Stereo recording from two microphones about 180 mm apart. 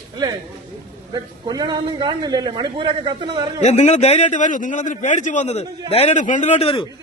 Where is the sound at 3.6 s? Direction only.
40° left (ahead or behind).